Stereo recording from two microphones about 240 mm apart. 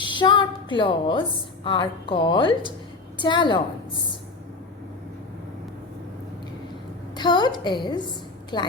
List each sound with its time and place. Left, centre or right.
0.0 s a woman's voice: centre
7.2 s a woman's voice: centre